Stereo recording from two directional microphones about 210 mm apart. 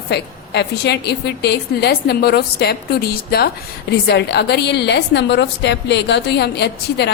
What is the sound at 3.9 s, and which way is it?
A woman's voice, 50° left (ahead or behind).